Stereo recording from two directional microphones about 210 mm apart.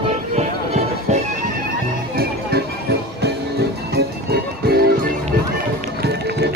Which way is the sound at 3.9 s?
50° right (ahead or behind).